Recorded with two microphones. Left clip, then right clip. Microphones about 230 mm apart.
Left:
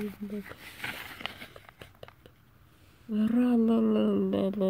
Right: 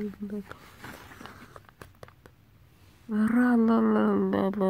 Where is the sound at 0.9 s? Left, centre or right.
Centre.